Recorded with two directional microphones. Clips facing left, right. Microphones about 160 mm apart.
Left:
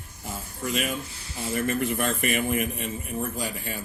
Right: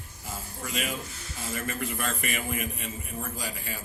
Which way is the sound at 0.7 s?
50° left (ahead or behind).